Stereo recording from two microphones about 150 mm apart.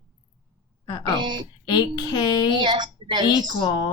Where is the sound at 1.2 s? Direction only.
30° right (ahead or behind).